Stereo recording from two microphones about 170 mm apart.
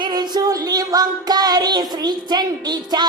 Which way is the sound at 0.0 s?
25° right (ahead or behind).